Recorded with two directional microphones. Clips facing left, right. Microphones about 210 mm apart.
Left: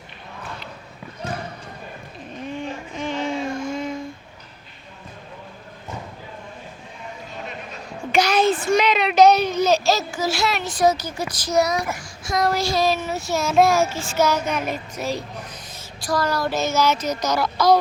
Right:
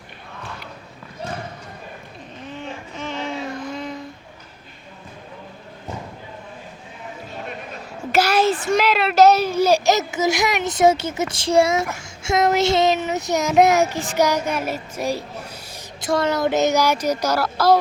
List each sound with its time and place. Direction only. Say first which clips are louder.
2.5 s child singing: left 3 dB; 15° left (ahead or behind)
8.1 s child singing: even; 5° right (ahead or behind)
16.0 s child singing: right 3 dB; 25° right (ahead or behind); by 17.7 s 5° right (ahead or behind)